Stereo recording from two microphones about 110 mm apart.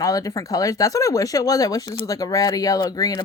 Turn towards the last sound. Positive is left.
turn(degrees=35)  # may be behind; listen again after turning